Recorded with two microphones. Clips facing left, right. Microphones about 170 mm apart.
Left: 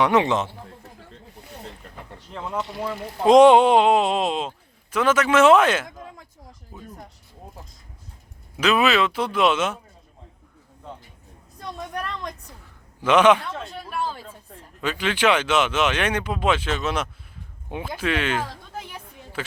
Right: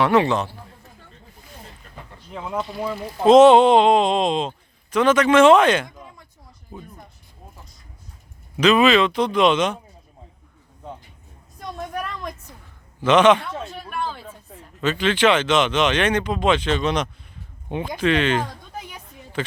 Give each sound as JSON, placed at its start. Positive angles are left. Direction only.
{"t": 0.0, "sound": "a man's voice", "side_deg": 20}
{"t": 2.3, "sound": "speech", "side_deg": -10}
{"t": 3.2, "sound": "speech", "side_deg": 15}
{"t": 8.5, "sound": "speech", "side_deg": 5}
{"t": 11.8, "sound": "a sound", "side_deg": -5}
{"t": 13.0, "sound": "speech", "side_deg": 10}
{"t": 13.4, "sound": "speech", "side_deg": 0}